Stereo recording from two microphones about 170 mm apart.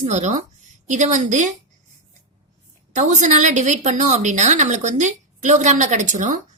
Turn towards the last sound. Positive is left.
turn(degrees=-45)  # may be behind; listen again after turning